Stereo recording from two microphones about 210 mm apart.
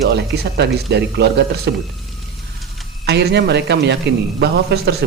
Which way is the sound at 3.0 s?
55° right (ahead or behind).